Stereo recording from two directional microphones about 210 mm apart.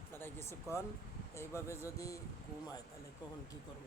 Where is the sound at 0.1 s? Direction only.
10° left (ahead or behind).